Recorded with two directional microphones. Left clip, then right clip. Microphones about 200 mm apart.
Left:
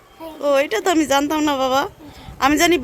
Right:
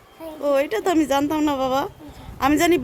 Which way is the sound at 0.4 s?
Centre (ahead or behind).